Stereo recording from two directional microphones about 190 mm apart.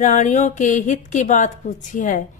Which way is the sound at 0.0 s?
40° left (ahead or behind).